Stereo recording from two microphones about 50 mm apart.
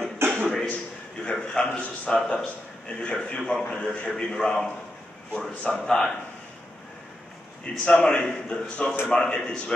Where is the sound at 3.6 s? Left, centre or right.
Left.